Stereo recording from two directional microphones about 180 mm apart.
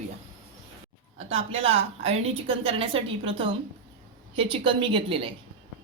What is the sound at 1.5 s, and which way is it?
A woman's voice, 35° right (ahead or behind).